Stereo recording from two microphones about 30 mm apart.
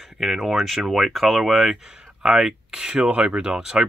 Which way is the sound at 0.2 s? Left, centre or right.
Centre.